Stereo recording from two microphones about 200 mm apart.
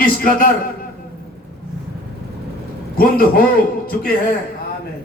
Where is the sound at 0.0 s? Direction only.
45° left (ahead or behind).